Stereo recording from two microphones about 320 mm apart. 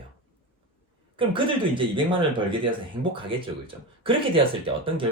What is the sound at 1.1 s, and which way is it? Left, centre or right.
Speech, centre.